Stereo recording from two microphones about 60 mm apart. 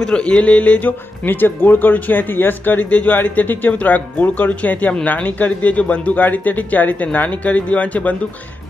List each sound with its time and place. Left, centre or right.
0.0 s a man's voice: centre